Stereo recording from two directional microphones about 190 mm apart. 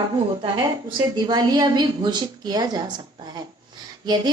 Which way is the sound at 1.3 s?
20° right (ahead or behind).